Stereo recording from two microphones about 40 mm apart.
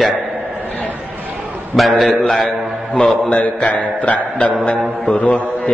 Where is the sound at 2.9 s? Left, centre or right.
Left.